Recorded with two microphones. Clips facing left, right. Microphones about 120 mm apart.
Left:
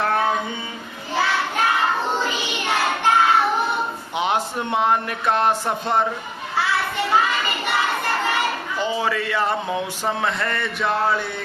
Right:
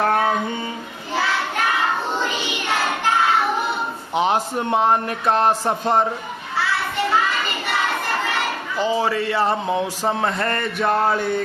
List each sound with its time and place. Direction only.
4.1 s speech: 35° right (ahead or behind)
8.8 s speech: 35° right (ahead or behind)